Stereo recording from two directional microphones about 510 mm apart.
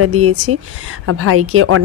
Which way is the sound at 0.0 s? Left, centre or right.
Right.